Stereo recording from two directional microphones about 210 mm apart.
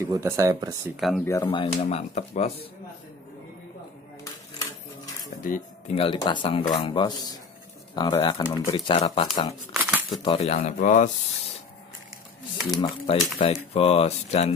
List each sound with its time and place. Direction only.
0.0 s speech: 15° right (ahead or behind)
0.9 s speech: centre (ahead or behind)
1.2 s speech: 15° left (ahead or behind); by 2.7 s 30° left (ahead or behind)
5.4 s speech: 40° left (ahead or behind)
5.9 s speech: 20° left (ahead or behind)
9.7 s crumpling: 5° right (ahead or behind)
10.2 s speech: 30° left (ahead or behind)
12.7 s speech: 25° left (ahead or behind)